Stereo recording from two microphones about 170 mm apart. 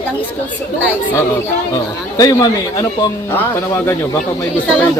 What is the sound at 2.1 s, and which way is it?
A man's voice, 20° left (ahead or behind).